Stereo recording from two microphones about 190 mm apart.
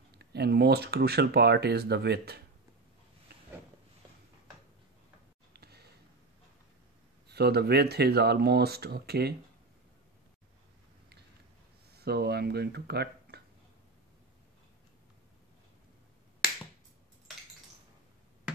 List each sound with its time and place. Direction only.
0.1 s speech: 60° right (ahead or behind)
5.5 s a sound: 60° right (ahead or behind)
7.2 s speech: 60° right (ahead or behind)
11.9 s speech: 60° right (ahead or behind)